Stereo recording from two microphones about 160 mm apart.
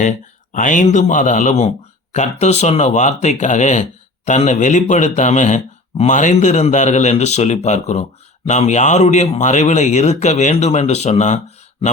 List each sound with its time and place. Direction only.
0.5 s speech: 55° left (ahead or behind)